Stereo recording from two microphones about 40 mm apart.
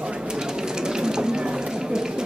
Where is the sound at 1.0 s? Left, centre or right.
Centre.